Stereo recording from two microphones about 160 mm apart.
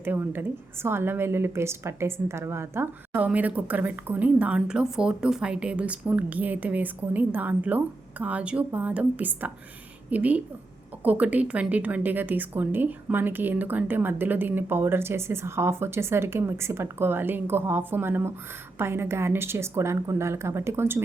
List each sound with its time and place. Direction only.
0.0 s a woman's voice: 15° right (ahead or behind)